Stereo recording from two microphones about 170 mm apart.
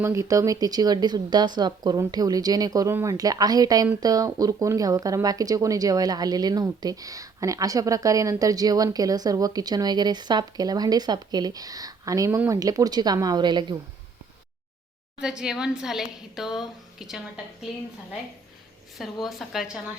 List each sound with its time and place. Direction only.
0.0 s speech: 15° right (ahead or behind)
15.2 s a woman's voice: 5° right (ahead or behind)
19.2 s a woman's voice: centre (ahead or behind)